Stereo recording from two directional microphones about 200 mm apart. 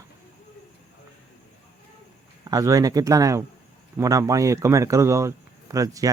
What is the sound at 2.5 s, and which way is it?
Speech, 15° right (ahead or behind).